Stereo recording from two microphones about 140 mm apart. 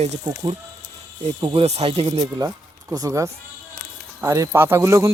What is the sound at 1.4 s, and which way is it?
Speech, 35° right (ahead or behind).